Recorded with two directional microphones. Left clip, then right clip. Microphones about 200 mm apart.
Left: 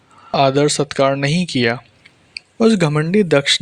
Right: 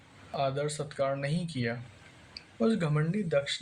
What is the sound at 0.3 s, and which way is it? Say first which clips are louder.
Speech: left 17 dB; 45° left (ahead or behind).